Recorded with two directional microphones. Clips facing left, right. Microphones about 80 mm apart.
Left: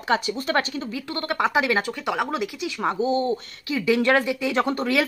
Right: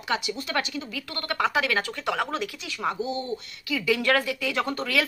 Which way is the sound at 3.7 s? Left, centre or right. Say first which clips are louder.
Left 4 dB; left.